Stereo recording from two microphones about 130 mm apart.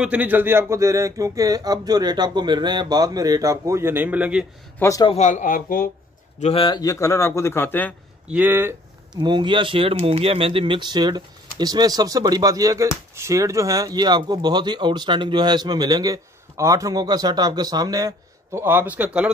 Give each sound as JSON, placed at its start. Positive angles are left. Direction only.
{"t": 0.0, "sound": "speech", "side_deg": -10}
{"t": 4.7, "sound": "speech", "side_deg": 25}
{"t": 5.1, "sound": "a man's voice", "side_deg": 65}
{"t": 6.4, "sound": "speech", "side_deg": 50}
{"t": 6.7, "sound": "speech", "side_deg": 30}
{"t": 8.3, "sound": "speech", "side_deg": -15}
{"t": 9.1, "sound": "speech", "side_deg": -35}